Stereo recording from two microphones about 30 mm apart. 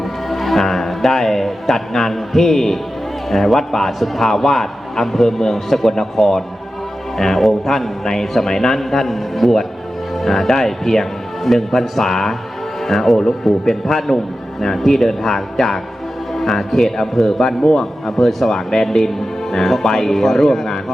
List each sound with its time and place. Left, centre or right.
0.0 s a man's voice: centre
18.9 s a man's voice: centre